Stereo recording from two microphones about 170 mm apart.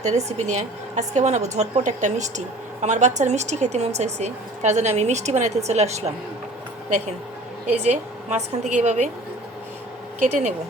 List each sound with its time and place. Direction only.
0.0 s a woman's voice: 40° right (ahead or behind)
7.9 s a woman's voice: 40° right (ahead or behind)
10.2 s a woman's voice: 50° right (ahead or behind)